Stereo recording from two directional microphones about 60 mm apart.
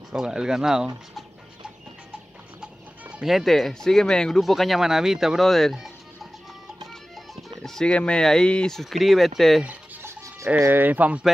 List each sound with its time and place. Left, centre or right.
0.1 s speech: centre
2.6 s music: centre
3.3 s speech: centre
4.4 s speech: centre
5.5 s speech: centre
7.4 s speech: centre
8.7 s speech: centre
10.7 s speech: right